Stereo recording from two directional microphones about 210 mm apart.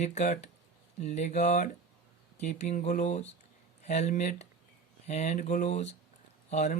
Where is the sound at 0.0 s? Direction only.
35° left (ahead or behind).